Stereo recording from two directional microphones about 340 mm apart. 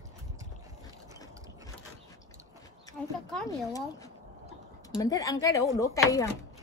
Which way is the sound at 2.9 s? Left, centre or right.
Centre.